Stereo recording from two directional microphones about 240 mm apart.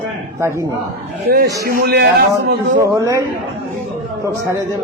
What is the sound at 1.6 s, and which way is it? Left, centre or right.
Speech, right.